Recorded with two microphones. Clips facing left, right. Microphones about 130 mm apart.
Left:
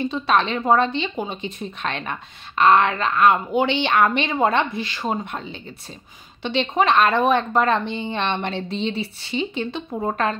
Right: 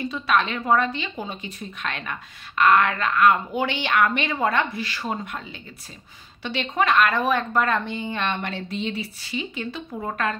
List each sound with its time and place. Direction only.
0.0 s a woman's voice: 30° left (ahead or behind)